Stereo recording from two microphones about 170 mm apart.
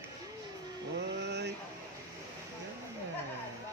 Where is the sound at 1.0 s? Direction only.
85° right.